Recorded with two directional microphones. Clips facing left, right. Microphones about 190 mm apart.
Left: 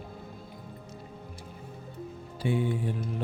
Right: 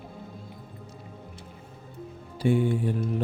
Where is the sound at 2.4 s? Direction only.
45° right (ahead or behind).